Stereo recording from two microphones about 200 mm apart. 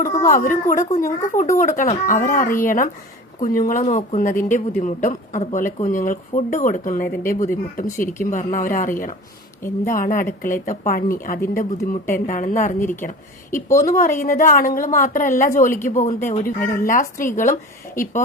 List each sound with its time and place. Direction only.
0.3 s a woman's voice: 40° left (ahead or behind)